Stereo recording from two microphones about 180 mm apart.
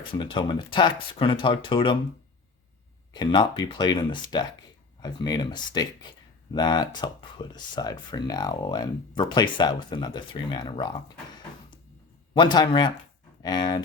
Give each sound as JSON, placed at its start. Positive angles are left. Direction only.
{"t": 0.1, "sound": "speech", "side_deg": 25}
{"t": 3.1, "sound": "speech", "side_deg": 25}
{"t": 12.3, "sound": "speech", "side_deg": 25}